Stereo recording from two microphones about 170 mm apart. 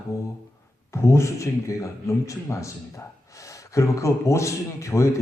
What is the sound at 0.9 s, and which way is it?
A man's voice, 15° left (ahead or behind).